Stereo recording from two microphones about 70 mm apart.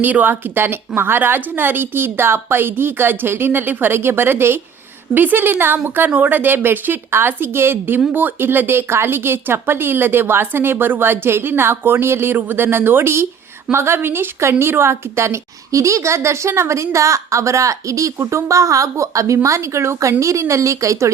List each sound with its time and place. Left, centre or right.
0.0 s a woman's voice: right